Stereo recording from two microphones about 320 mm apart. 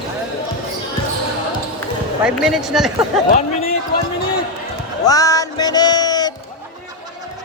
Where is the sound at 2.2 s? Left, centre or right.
Centre.